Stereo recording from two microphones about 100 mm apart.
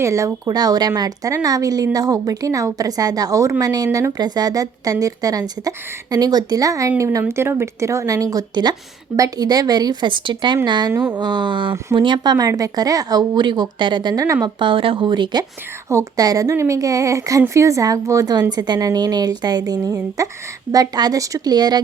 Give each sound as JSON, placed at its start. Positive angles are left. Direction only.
{"t": 0.0, "sound": "a woman's voice", "side_deg": -30}
{"t": 10.9, "sound": "speech", "side_deg": -20}
{"t": 11.2, "sound": "speech", "side_deg": -50}
{"t": 14.4, "sound": "speech", "side_deg": -55}
{"t": 15.9, "sound": "a woman's voice", "side_deg": -35}